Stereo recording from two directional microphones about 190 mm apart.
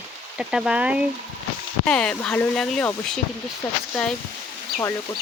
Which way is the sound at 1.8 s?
5° left (ahead or behind).